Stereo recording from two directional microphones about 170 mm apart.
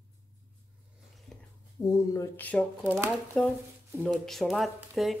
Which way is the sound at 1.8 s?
20° left (ahead or behind).